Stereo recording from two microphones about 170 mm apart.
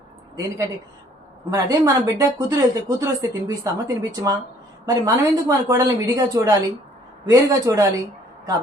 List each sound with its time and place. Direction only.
0.3 s speech: 20° right (ahead or behind)